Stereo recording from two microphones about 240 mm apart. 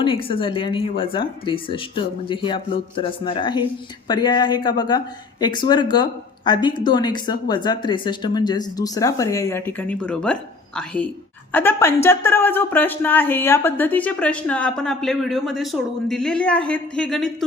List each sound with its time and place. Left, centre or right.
0.0 s speech: left; by 17.3 s centre